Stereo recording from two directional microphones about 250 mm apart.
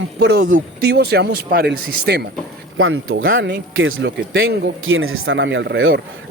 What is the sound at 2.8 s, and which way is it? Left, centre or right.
Speech, right.